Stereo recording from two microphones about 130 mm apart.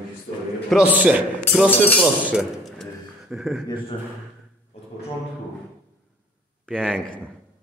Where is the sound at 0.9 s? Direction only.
10° right (ahead or behind).